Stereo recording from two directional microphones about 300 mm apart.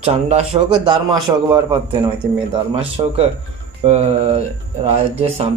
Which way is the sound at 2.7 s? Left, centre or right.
Centre.